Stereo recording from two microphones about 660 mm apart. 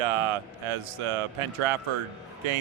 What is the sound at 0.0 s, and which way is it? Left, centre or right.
Speech, right.